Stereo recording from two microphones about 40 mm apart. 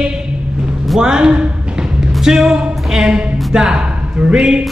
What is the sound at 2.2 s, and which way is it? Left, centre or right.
Music, centre.